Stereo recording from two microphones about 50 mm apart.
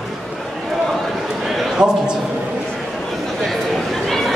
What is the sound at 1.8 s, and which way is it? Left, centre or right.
Speech, centre.